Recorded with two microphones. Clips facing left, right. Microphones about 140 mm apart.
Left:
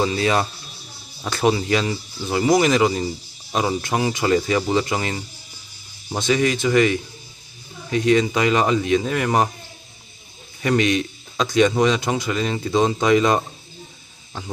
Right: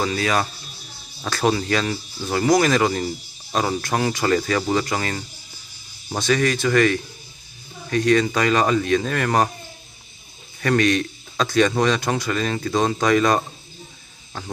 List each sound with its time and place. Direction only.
0.0 s speech: 25° left (ahead or behind)
10.6 s speech: 20° left (ahead or behind)